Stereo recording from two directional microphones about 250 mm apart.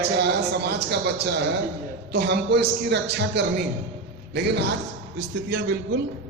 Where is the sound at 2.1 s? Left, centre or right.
Right.